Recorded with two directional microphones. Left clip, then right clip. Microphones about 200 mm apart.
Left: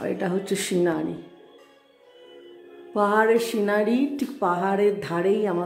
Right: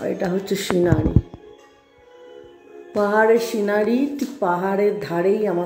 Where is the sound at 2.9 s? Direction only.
Centre (ahead or behind).